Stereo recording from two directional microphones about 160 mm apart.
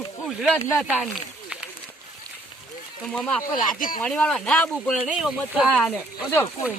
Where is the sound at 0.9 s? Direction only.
5° right (ahead or behind).